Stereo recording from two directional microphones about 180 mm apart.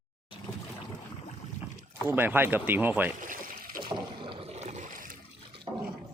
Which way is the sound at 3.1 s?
50° right (ahead or behind).